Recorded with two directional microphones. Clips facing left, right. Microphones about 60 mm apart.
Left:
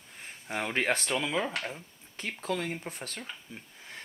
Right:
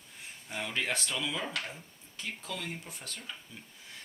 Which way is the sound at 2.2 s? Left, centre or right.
Left.